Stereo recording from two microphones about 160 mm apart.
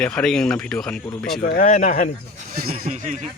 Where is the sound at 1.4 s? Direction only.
60° left (ahead or behind).